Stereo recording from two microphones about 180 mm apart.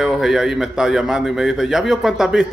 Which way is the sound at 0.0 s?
Centre (ahead or behind).